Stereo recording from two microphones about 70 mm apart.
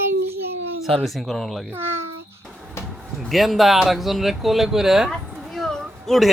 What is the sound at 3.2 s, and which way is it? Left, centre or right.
Speech, centre.